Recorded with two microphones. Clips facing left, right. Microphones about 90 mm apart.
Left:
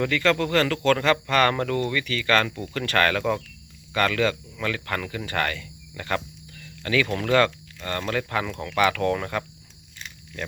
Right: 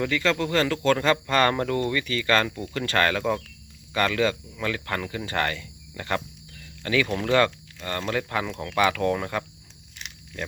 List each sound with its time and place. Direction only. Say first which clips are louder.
0.0 s speech: left 2 dB; 15° right (ahead or behind)